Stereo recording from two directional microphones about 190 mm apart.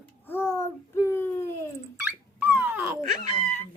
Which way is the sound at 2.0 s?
10° right (ahead or behind).